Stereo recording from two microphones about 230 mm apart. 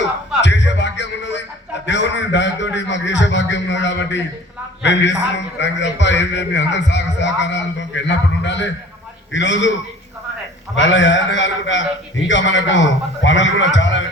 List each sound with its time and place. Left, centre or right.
0.4 s music: left
1.9 s a man's voice: left
10.8 s a man's voice: left